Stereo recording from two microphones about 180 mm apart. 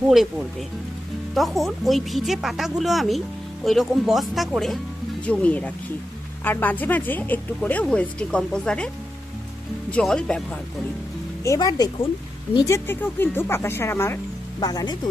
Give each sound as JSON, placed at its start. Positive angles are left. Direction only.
{"t": 0.1, "sound": "speech", "side_deg": 0}
{"t": 9.9, "sound": "speech", "side_deg": 5}
{"t": 11.4, "sound": "speech", "side_deg": 20}